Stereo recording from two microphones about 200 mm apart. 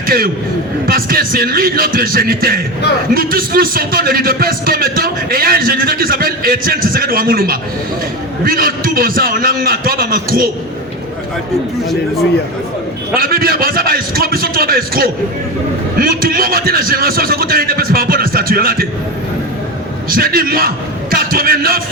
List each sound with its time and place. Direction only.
0.9 s speech: 45° right (ahead or behind)
13.1 s speech: 45° right (ahead or behind)
20.1 s a man's voice: 45° right (ahead or behind)